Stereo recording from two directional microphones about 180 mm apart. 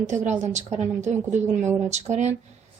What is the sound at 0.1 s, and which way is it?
A woman's voice, 40° right (ahead or behind).